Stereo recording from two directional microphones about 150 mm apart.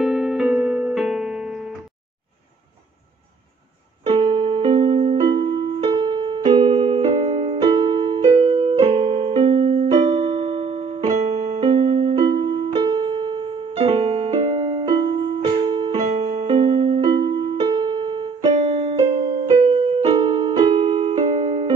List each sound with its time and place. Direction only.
0.0 s music: centre (ahead or behind)
4.0 s music: 40° right (ahead or behind)
11.1 s keyboard: 45° right (ahead or behind)
12.3 s piano: 35° right (ahead or behind)
15.4 s music: 30° right (ahead or behind)
15.9 s music: 45° right (ahead or behind)